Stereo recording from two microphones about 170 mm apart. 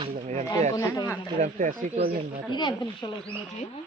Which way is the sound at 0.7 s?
20° left (ahead or behind).